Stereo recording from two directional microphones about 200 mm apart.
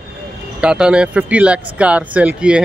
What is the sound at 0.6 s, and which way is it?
Speech, 5° right (ahead or behind).